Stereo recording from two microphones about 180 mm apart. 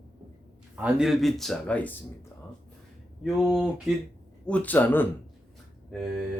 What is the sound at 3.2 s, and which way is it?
A man's voice, centre (ahead or behind).